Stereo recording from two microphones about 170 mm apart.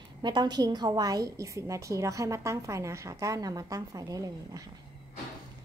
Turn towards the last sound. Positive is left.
turn(degrees=-20)  # may be behind; listen again after turning